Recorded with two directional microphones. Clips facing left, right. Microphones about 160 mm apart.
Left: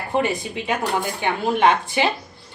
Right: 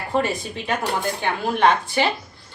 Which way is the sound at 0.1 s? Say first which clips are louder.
Left 1 dB; 15° left (ahead or behind).